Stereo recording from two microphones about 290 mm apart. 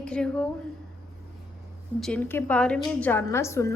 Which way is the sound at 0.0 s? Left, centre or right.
Centre.